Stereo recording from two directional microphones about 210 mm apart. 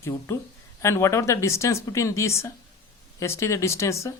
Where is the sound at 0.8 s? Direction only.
10° left (ahead or behind).